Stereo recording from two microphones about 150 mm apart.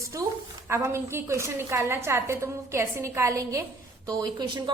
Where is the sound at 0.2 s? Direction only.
20° right (ahead or behind).